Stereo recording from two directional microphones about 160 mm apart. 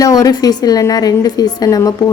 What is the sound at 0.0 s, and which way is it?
A woman's voice, 20° left (ahead or behind).